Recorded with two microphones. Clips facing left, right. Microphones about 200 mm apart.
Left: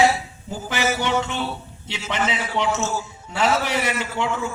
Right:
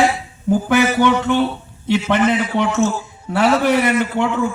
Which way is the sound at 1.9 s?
55° right (ahead or behind).